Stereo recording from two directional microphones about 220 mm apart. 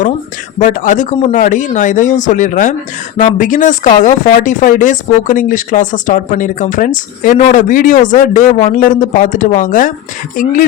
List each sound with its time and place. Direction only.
0.6 s speech: 35° left (ahead or behind)